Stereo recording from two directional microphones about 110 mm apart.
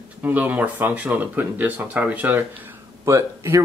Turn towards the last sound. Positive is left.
turn(degrees=-25)  # may be behind; listen again after turning